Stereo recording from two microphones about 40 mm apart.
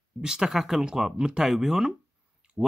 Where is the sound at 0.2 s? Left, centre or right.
Centre.